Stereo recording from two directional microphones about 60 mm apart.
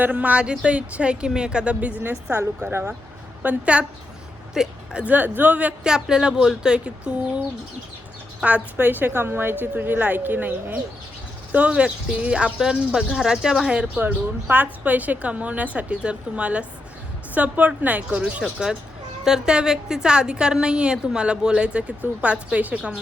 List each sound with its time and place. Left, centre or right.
0.0 s a woman's voice: right
3.4 s a woman's voice: right
4.5 s speech: centre
5.0 s a woman's voice: right
5.8 s a woman's voice: centre; by 10.8 s right
11.5 s a woman's voice: right
14.0 s a woman's voice: right
18.4 s a woman's voice: centre